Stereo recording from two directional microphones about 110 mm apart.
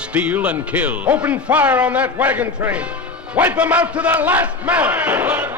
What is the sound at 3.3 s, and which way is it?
Battle cry, 15° right (ahead or behind).